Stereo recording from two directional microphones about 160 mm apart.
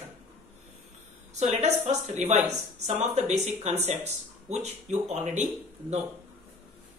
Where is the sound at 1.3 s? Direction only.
45° right (ahead or behind).